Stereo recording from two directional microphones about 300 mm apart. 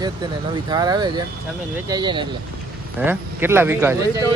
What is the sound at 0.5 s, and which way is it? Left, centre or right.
Speech, centre.